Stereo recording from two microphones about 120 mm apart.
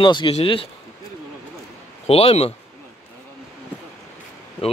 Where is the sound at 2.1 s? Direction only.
55° left (ahead or behind).